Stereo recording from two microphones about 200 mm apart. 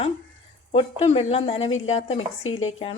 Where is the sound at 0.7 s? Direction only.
30° left (ahead or behind).